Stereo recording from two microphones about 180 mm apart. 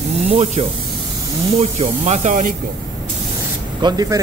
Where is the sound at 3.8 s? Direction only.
20° right (ahead or behind).